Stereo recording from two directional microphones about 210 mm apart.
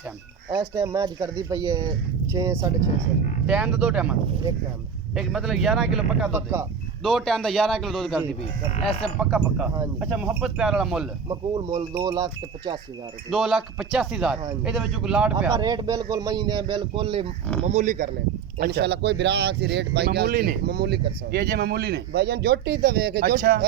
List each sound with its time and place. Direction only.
0.5 s speech: 15° right (ahead or behind)
3.4 s speech: 5° right (ahead or behind)
5.1 s speech: centre (ahead or behind)
7.0 s speech: centre (ahead or behind)
8.7 s speech: 25° left (ahead or behind)
10.0 s speech: 5° right (ahead or behind)
11.3 s a man's voice: 20° right (ahead or behind)
13.3 s speech: centre (ahead or behind)
15.4 s a man's voice: 20° right (ahead or behind)
17.6 s speech: 35° right (ahead or behind)
18.6 s speech: 50° right (ahead or behind)